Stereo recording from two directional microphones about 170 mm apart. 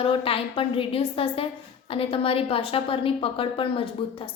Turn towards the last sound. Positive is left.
turn(degrees=30)  # may be behind; listen again after turning